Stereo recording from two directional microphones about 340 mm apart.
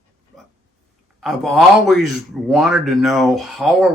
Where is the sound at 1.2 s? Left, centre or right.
Centre.